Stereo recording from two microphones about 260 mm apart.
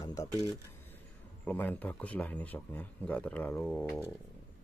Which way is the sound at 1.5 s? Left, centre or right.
Centre.